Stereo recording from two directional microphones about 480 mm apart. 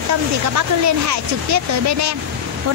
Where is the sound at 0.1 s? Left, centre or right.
Right.